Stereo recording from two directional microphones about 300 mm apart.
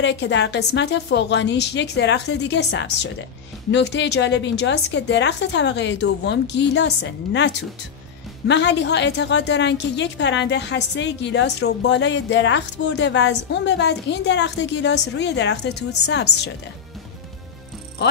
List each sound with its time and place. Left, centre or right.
0.0 s a woman's voice: left